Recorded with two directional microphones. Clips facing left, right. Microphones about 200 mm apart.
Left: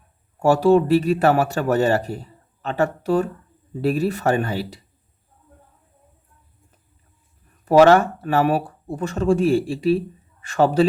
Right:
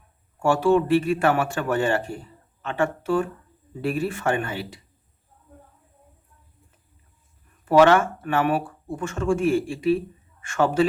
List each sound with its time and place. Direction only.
0.3 s speech: 35° left (ahead or behind)
7.6 s speech: 40° left (ahead or behind)